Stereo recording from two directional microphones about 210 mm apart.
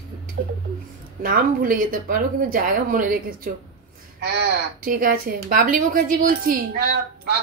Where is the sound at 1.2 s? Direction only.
40° right (ahead or behind).